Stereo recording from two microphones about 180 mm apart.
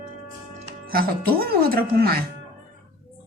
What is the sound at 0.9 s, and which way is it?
Speech, 55° right (ahead or behind).